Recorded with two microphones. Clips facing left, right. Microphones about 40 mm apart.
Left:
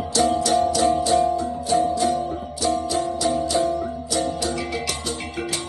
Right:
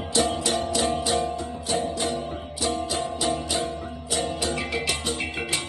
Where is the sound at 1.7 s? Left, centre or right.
Right.